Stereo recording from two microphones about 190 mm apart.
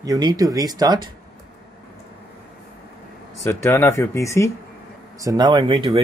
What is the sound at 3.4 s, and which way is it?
Speech, 15° left (ahead or behind).